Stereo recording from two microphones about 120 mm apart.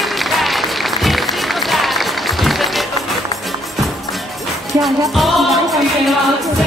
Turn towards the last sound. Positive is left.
turn(degrees=0)  # may be behind; listen again after turning